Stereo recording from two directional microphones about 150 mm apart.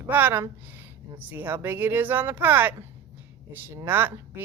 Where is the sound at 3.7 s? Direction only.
15° right (ahead or behind).